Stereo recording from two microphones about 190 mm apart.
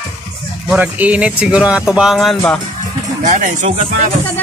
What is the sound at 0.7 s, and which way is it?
Speech, 10° right (ahead or behind).